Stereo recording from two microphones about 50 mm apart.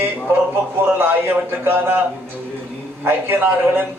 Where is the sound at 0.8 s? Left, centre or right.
Right.